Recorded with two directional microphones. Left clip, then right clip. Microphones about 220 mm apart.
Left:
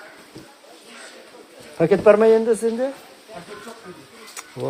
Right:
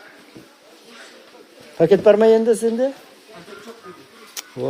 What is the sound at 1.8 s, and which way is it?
A woman's voice, 30° right (ahead or behind).